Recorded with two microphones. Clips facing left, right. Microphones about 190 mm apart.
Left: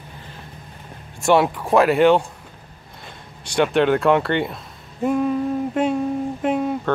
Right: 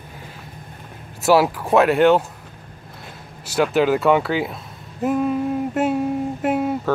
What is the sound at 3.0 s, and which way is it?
Speech, 5° right (ahead or behind).